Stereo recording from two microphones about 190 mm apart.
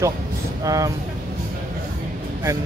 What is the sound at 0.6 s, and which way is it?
Speech, 15° right (ahead or behind).